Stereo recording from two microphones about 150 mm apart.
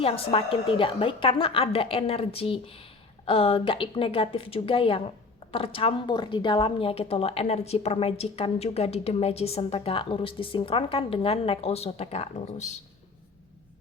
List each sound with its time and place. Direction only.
0.0 s a woman's voice: 40° left (ahead or behind)